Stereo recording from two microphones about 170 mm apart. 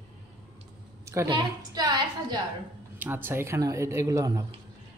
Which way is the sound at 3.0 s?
10° right (ahead or behind).